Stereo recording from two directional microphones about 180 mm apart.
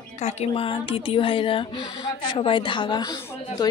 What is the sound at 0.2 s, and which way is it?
A woman's voice, 40° left (ahead or behind).